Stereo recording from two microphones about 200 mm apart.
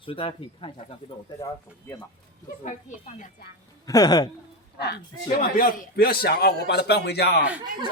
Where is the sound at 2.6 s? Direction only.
40° left (ahead or behind).